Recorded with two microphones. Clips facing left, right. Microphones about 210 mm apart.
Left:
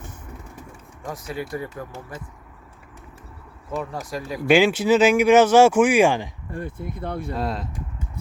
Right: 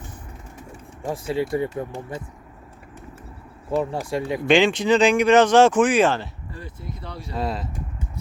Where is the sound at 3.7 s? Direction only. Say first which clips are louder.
Right 5 dB; 30° right (ahead or behind).